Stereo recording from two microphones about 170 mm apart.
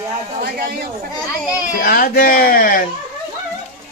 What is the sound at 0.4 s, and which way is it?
Speech, 65° right (ahead or behind).